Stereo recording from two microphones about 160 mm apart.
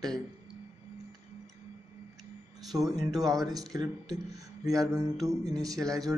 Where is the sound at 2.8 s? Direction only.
25° right (ahead or behind).